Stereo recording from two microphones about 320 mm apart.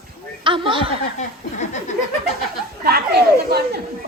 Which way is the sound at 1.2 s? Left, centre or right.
Left.